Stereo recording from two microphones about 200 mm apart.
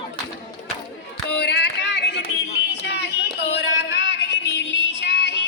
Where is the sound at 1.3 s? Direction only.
60° left (ahead or behind).